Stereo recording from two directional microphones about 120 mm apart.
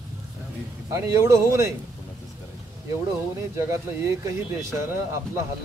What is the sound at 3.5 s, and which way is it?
A man's voice, 25° right (ahead or behind).